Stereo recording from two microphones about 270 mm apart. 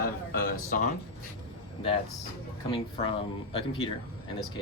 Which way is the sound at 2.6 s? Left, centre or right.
Centre.